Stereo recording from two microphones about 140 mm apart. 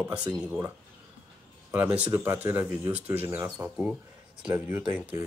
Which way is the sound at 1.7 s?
10° right (ahead or behind).